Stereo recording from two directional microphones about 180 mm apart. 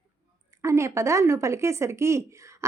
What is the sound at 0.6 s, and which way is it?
Speech, 15° right (ahead or behind).